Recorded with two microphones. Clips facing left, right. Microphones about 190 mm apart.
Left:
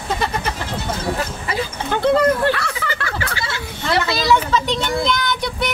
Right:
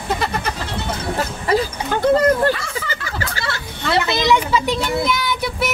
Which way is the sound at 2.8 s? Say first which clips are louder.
Left 3 dB; 65° left (ahead or behind).